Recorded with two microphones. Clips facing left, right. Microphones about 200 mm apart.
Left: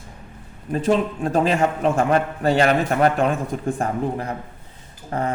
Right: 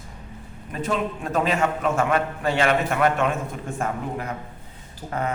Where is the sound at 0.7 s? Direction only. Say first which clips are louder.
Left 6 dB; 35° left (ahead or behind).